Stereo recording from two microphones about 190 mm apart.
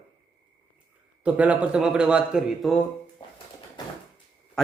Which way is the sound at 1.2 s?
5° right (ahead or behind).